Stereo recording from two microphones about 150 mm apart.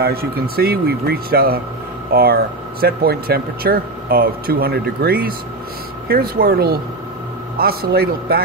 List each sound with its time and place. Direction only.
0.0 s speech: 90° right